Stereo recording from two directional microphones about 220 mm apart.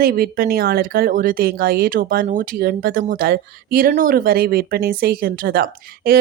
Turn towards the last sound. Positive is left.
turn(degrees=-45)  # may be behind; listen again after turning